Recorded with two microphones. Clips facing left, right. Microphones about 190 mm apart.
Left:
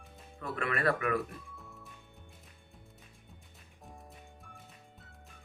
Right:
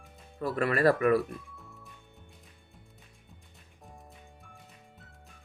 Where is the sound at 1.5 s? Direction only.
Centre (ahead or behind).